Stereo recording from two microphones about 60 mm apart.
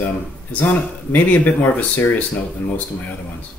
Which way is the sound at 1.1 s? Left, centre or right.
Left.